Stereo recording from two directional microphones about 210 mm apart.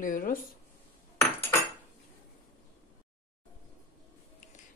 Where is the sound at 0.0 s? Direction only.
40° left (ahead or behind).